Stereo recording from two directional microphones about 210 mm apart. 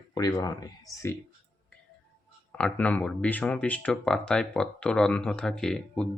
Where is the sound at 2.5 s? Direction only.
5° left (ahead or behind).